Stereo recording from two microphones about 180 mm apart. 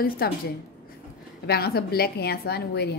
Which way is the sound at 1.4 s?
60° left (ahead or behind).